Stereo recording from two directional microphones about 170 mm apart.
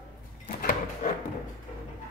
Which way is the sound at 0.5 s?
55° left (ahead or behind).